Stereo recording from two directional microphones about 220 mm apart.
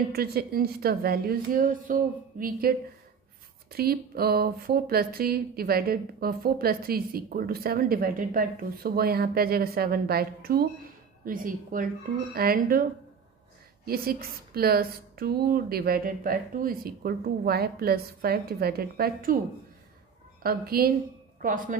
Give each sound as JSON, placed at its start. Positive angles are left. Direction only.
{"t": 0.1, "sound": "speech", "side_deg": -45}
{"t": 3.7, "sound": "a woman's voice", "side_deg": -45}
{"t": 13.8, "sound": "speech", "side_deg": -45}
{"t": 20.4, "sound": "a woman's voice", "side_deg": -45}